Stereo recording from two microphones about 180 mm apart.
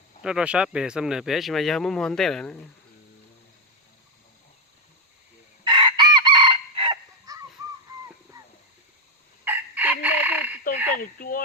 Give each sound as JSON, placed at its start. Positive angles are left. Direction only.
{"t": 0.2, "sound": "speech", "side_deg": -5}
{"t": 5.6, "sound": "chicken", "side_deg": -25}
{"t": 8.4, "sound": "dog", "side_deg": -20}
{"t": 9.4, "sound": "fowl", "side_deg": -10}
{"t": 10.9, "sound": "fowl", "side_deg": 50}